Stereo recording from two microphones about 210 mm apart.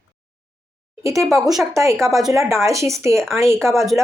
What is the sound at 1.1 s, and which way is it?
Speech, centre (ahead or behind).